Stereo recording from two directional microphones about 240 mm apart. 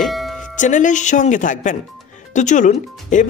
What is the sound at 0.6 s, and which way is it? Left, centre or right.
Speech, left.